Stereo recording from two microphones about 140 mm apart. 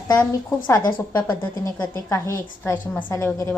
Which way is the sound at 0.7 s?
25° left (ahead or behind).